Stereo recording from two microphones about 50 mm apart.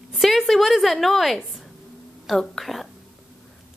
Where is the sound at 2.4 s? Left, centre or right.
Centre.